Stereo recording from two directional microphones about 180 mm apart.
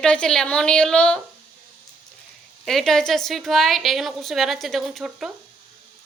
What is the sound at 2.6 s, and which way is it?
A woman's voice, centre (ahead or behind).